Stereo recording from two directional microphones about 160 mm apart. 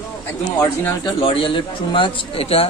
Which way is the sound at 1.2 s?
35° left (ahead or behind).